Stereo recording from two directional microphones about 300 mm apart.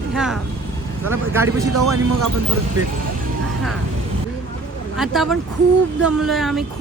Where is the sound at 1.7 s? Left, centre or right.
Right.